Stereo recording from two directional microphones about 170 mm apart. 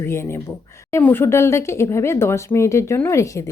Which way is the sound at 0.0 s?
15° left (ahead or behind).